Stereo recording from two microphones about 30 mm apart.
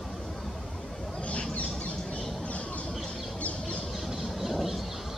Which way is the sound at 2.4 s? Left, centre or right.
Left.